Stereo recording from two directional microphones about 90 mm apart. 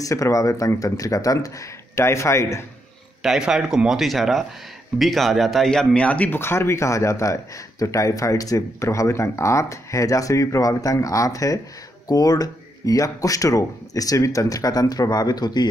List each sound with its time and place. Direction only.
0.0 s speech: 40° left (ahead or behind)
3.2 s speech: 5° right (ahead or behind); by 15.6 s 50° left (ahead or behind)